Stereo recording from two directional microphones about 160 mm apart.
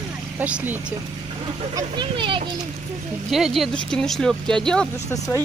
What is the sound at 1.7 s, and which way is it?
Speech, 30° right (ahead or behind).